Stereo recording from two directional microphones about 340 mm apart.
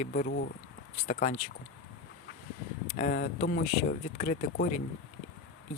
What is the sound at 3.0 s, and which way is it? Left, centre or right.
Speech, left.